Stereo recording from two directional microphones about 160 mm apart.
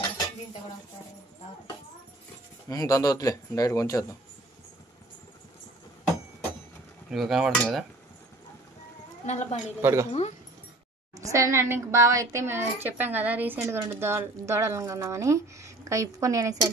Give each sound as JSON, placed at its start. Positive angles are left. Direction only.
{"t": 2.7, "sound": "speech", "side_deg": 25}
{"t": 7.1, "sound": "cutlery", "side_deg": 0}
{"t": 9.2, "sound": "a woman's voice", "side_deg": 45}
{"t": 9.8, "sound": "a woman's voice", "side_deg": -15}
{"t": 11.1, "sound": "a woman's voice", "side_deg": -20}